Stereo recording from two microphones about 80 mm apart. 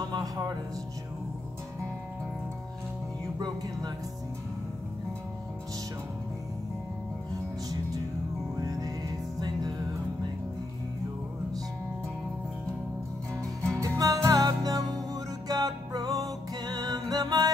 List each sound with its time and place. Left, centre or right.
0.1 s music: right
3.3 s music: right
8.5 s music: right
13.6 s music: right